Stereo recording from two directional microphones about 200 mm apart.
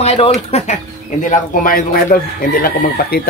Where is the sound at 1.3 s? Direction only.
45° left (ahead or behind).